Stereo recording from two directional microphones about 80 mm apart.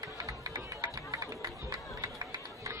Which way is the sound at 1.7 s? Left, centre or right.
Right.